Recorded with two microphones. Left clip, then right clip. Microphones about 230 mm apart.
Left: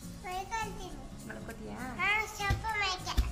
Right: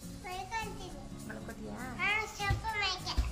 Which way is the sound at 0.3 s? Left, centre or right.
Centre.